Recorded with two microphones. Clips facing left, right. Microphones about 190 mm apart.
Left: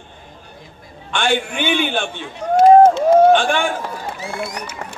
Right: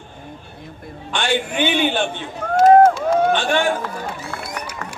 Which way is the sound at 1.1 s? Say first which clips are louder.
Left 1 dB; 50° left (ahead or behind).